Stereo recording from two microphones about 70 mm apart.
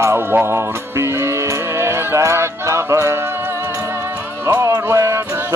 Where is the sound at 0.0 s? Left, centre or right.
Right.